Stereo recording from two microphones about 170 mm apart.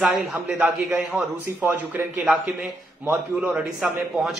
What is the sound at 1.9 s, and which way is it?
A man's voice, 10° right (ahead or behind).